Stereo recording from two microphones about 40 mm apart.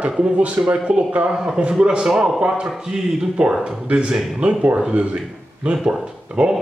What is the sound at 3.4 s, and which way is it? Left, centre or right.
A man's voice, right.